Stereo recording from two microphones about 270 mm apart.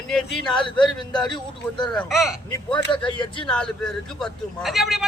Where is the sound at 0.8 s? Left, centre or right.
Centre.